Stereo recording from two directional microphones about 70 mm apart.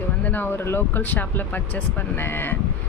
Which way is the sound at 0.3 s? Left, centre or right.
Left.